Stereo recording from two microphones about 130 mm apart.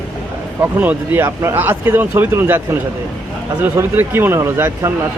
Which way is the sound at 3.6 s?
15° right (ahead or behind).